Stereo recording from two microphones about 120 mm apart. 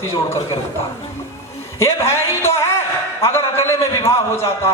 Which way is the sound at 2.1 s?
20° left (ahead or behind).